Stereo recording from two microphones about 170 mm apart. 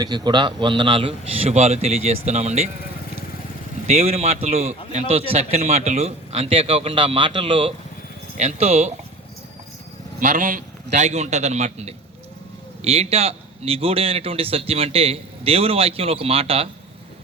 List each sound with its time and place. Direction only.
0.0 s speech: 25° right (ahead or behind); by 2.6 s 40° right (ahead or behind)
3.8 s speech: 40° right (ahead or behind)
8.4 s speech: 40° right (ahead or behind)
10.2 s speech: 50° right (ahead or behind)